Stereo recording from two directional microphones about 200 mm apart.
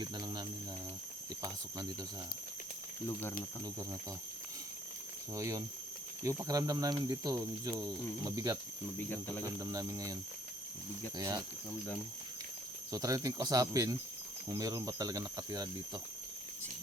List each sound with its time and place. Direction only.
0.0 s speech: 20° right (ahead or behind)
5.3 s speech: 15° right (ahead or behind)
9.0 s speech: 10° left (ahead or behind)
9.4 s speech: 15° right (ahead or behind)
11.2 s speech: 20° right (ahead or behind)
12.9 s speech: 15° right (ahead or behind)